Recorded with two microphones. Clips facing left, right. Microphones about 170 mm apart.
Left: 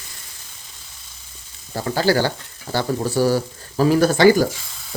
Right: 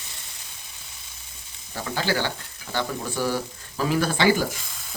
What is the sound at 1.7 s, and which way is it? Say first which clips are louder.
Speech: left 8 dB; 40° left (ahead or behind).